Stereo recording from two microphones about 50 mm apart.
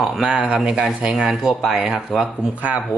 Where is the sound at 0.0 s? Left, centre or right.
Centre.